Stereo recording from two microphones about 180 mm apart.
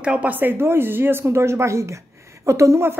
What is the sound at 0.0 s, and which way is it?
A woman's voice, 5° right (ahead or behind).